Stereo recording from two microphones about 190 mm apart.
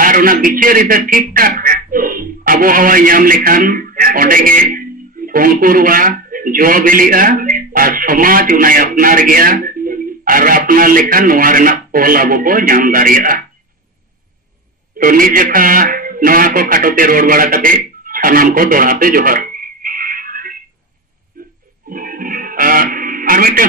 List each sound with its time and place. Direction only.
0.0 s speech: 45° right (ahead or behind)
15.0 s speech: 45° right (ahead or behind)
21.4 s a sound: 45° right (ahead or behind)
21.8 s music: 50° right (ahead or behind)